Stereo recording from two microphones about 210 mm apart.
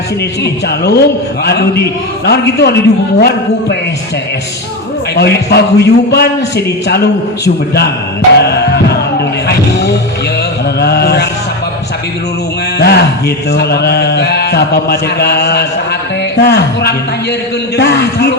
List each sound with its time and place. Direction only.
0.4 s speech: 50° left (ahead or behind)
5.1 s speech: 50° left (ahead or behind)
8.4 s music: 50° left (ahead or behind)
9.5 s vehicle: 50° left (ahead or behind)
10.8 s speech: 50° left (ahead or behind)
12.8 s speech: 50° left (ahead or behind)